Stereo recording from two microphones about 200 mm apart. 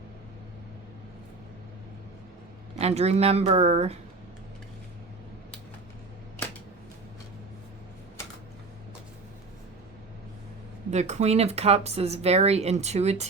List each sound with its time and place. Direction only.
2.7 s speech: 30° right (ahead or behind)
10.9 s speech: 35° right (ahead or behind)